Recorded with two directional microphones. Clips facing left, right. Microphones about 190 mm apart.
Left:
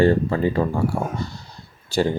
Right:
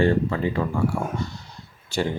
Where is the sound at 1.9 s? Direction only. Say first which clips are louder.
Left 5 dB; 35° left (ahead or behind).